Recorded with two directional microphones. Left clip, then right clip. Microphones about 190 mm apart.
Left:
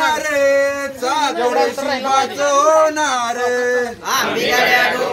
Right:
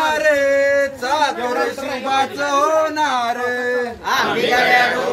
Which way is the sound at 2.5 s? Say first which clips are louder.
Left 4 dB; 15° left (ahead or behind).